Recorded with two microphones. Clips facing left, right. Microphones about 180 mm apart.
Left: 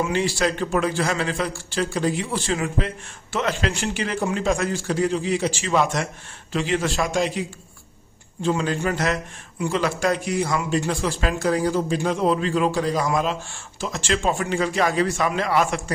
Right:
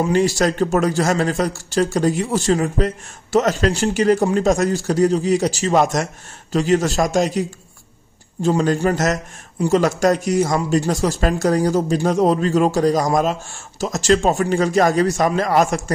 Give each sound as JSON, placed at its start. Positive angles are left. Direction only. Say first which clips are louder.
{"t": 0.0, "sound": "a man's voice", "louder": "right 5 dB", "side_deg": -40}